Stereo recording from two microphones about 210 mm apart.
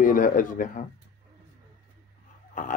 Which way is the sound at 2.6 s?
40° left (ahead or behind).